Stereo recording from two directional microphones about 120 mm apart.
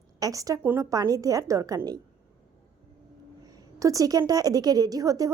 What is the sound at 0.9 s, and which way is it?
Speech, 30° right (ahead or behind).